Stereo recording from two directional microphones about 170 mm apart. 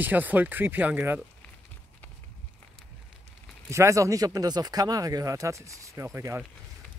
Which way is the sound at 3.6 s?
15° right (ahead or behind).